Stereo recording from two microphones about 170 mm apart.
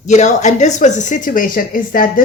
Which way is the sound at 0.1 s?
45° left (ahead or behind).